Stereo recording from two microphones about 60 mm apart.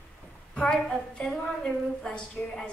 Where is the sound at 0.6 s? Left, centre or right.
Centre.